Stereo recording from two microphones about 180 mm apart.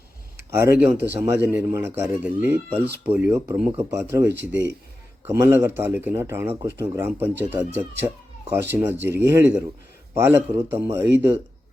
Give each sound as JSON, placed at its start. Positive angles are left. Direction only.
{"t": 0.5, "sound": "a man's voice", "side_deg": -15}
{"t": 4.3, "sound": "speech", "side_deg": -80}
{"t": 5.3, "sound": "a man's voice", "side_deg": -15}